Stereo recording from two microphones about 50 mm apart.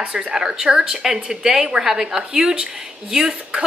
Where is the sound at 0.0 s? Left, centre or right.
Centre.